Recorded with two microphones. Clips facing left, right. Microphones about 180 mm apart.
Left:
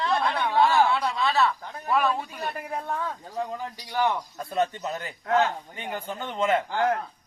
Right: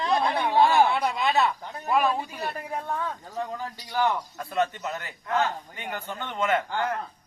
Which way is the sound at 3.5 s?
15° left (ahead or behind).